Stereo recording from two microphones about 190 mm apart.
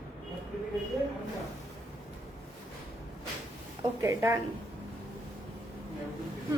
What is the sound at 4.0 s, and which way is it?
Speech, 15° right (ahead or behind).